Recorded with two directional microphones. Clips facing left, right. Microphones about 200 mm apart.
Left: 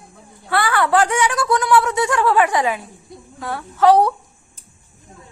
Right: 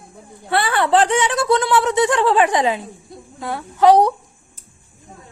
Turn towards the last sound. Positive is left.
turn(degrees=-15)  # may be behind; listen again after turning